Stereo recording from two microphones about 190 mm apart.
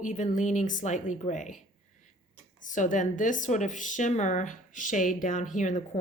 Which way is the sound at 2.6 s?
40° left (ahead or behind).